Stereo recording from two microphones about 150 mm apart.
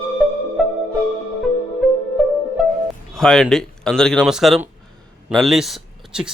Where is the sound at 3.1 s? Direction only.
5° left (ahead or behind).